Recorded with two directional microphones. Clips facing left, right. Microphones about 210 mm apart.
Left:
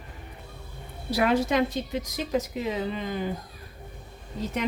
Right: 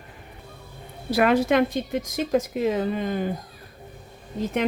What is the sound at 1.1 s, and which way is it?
A woman's voice, 60° right (ahead or behind).